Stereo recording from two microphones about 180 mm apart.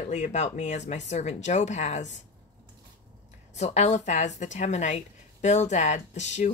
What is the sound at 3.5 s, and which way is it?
Speech, 40° left (ahead or behind).